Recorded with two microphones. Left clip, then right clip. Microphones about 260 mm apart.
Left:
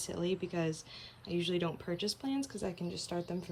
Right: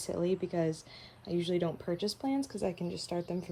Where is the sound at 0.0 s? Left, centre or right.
Centre.